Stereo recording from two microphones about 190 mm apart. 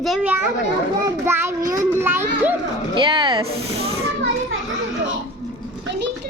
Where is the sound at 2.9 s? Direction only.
25° right (ahead or behind).